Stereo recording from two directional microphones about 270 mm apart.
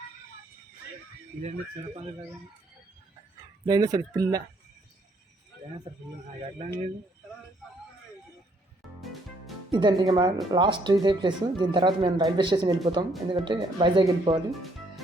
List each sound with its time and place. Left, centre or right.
1.4 s speech: right
3.7 s speech: centre
9.7 s speech: centre